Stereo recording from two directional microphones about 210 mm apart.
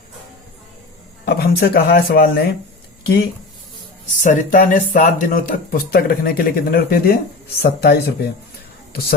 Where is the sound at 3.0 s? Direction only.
50° left (ahead or behind).